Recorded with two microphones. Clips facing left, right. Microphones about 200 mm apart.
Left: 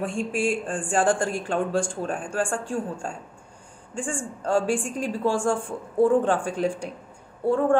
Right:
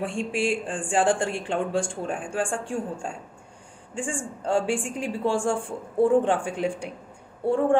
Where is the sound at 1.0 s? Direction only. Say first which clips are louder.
Even; 25° right (ahead or behind).